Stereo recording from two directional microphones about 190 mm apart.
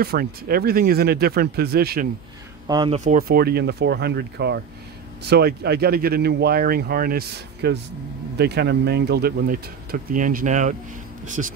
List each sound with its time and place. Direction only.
0.0 s speech: 50° right (ahead or behind)
2.7 s speech: 25° right (ahead or behind)
3.0 s speech: 45° right (ahead or behind)